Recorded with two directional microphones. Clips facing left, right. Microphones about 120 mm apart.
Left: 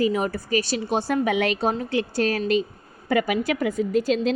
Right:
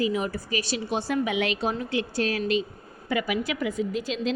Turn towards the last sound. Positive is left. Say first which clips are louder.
# left 6 dB
turn(degrees=45)  # may be behind; listen again after turning